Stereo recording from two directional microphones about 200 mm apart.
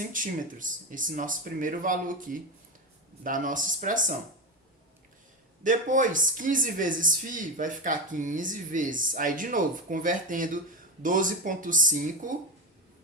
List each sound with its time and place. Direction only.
0.0 s speech: 40° right (ahead or behind)
5.6 s speech: 40° right (ahead or behind)